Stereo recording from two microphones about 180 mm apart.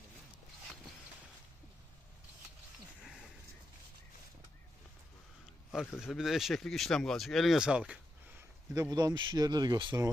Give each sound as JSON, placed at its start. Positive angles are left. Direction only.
{"t": 5.7, "sound": "speech", "side_deg": 0}
{"t": 8.7, "sound": "speech", "side_deg": -20}